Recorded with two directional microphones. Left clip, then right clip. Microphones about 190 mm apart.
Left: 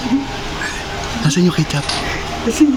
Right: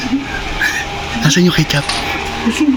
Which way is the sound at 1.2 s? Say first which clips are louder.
Right 5 dB; centre (ahead or behind).